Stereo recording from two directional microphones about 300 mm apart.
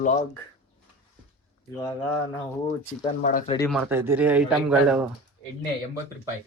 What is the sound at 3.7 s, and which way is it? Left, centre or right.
Speech, centre.